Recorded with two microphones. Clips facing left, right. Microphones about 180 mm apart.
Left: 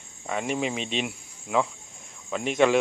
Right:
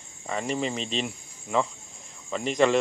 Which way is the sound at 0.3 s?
5° left (ahead or behind).